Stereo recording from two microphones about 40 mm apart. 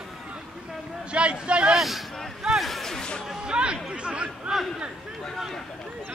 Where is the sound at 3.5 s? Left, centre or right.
Right.